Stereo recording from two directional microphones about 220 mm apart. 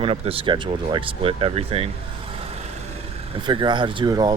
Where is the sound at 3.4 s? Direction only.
20° right (ahead or behind).